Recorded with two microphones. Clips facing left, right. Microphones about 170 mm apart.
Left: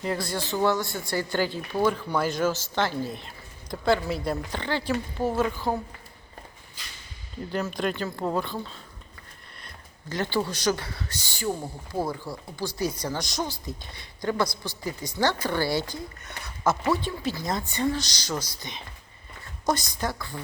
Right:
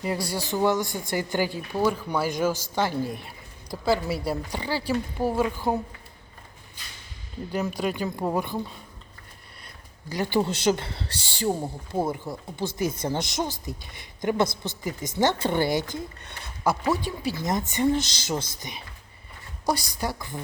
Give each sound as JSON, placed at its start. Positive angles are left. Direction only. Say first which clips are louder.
{"t": 0.0, "sound": "speech", "louder": "right 1 dB", "side_deg": -10}
{"t": 7.5, "sound": "speech", "louder": "right 1 dB", "side_deg": -10}
{"t": 10.1, "sound": "speech", "louder": "right 3 dB", "side_deg": -15}